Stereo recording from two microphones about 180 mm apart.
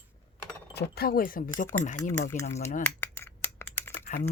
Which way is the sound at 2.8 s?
15° left (ahead or behind).